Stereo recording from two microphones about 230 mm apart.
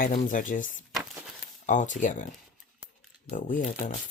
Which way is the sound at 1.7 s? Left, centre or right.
Left.